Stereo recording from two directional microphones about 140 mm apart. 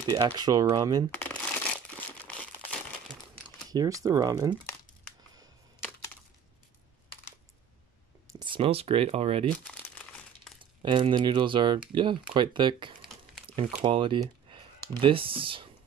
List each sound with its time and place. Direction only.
0.0 s speech: 30° right (ahead or behind)
1.1 s speech: 10° left (ahead or behind)
3.7 s speech: 25° right (ahead or behind)
8.3 s a sound: 30° right (ahead or behind)
8.5 s speech: 45° right (ahead or behind)
10.6 s speech: 35° right (ahead or behind)
13.5 s crumpling: 40° right (ahead or behind)
13.8 s speech: 35° right (ahead or behind)